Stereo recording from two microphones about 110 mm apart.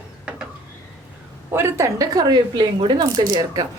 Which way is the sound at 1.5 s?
25° right (ahead or behind).